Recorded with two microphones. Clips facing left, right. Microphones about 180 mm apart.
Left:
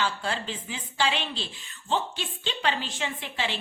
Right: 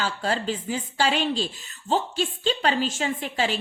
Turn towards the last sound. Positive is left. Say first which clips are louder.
# right 6 dB
turn(degrees=-40)  # may be behind; listen again after turning